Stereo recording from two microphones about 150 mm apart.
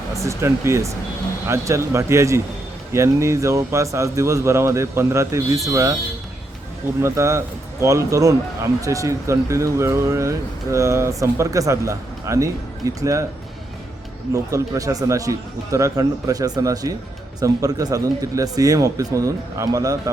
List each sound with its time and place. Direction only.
0.2 s speech: 20° right (ahead or behind)
7.0 s speech: 20° right (ahead or behind)
14.3 s speech: 20° right (ahead or behind)